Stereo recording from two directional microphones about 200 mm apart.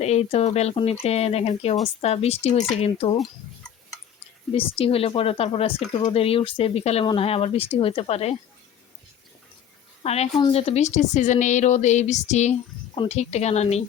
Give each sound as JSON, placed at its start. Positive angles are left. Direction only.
{"t": 0.0, "sound": "speech", "side_deg": 30}
{"t": 4.5, "sound": "speech", "side_deg": 30}
{"t": 10.0, "sound": "speech", "side_deg": 30}